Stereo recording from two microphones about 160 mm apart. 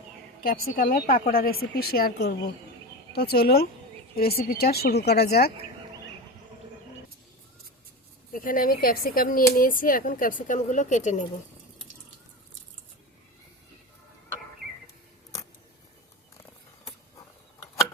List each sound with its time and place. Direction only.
0.4 s a woman's voice: 65° left (ahead or behind); by 5.5 s 85° left
8.3 s speech: 60° left (ahead or behind)